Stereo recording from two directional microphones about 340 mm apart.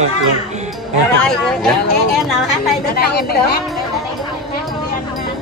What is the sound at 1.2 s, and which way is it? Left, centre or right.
Speech, centre.